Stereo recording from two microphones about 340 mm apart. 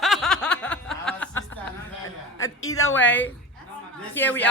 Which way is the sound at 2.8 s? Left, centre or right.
Left.